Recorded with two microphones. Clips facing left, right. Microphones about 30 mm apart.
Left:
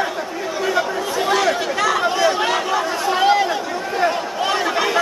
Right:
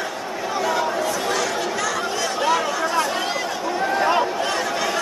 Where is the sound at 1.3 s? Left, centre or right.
Left.